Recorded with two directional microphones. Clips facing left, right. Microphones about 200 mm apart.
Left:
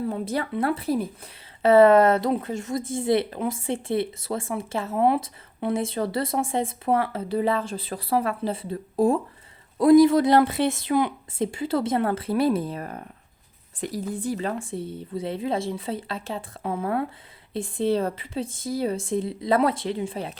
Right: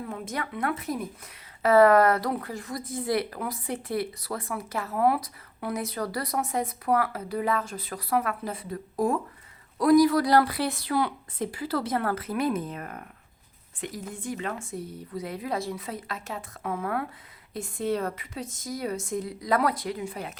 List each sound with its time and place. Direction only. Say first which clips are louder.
0.0 s speech: left 7 dB; 30° left (ahead or behind)
14.1 s speech: left 5 dB; 35° left (ahead or behind)